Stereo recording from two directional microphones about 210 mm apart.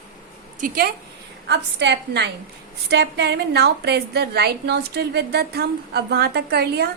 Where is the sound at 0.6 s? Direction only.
45° right (ahead or behind).